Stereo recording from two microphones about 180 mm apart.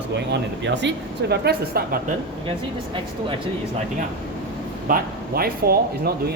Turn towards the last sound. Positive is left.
turn(degrees=-60)  # may be behind; listen again after turning